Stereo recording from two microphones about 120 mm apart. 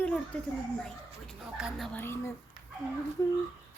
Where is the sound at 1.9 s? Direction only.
20° left (ahead or behind).